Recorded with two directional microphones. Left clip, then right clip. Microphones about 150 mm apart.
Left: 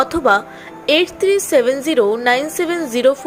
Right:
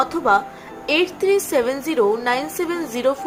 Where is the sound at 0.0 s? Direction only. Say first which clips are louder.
Left 3 dB; 25° left (ahead or behind).